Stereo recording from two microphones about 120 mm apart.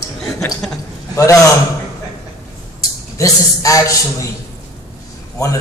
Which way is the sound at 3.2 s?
30° left (ahead or behind).